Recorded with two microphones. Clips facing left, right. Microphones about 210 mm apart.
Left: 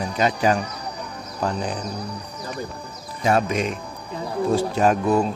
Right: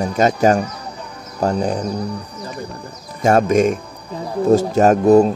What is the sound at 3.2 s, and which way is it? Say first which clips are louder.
Speech: right 7 dB; 45° right (ahead or behind).